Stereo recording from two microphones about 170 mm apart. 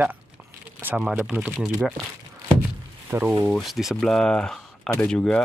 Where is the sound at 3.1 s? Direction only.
10° right (ahead or behind).